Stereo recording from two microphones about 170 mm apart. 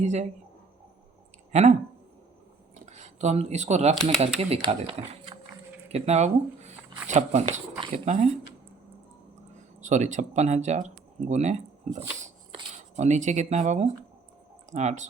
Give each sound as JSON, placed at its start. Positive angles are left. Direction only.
{"t": 0.0, "sound": "speech", "side_deg": -45}
{"t": 2.8, "sound": "speech", "side_deg": -45}
{"t": 9.8, "sound": "speech", "side_deg": -45}
{"t": 11.9, "sound": "dog", "side_deg": -40}
{"t": 12.7, "sound": "speech", "side_deg": -45}